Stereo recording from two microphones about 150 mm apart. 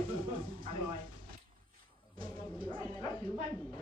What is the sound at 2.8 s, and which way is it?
Bow-wow, 25° left (ahead or behind).